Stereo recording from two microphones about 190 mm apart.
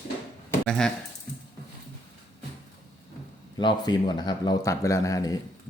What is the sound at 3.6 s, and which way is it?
Speech, 25° left (ahead or behind).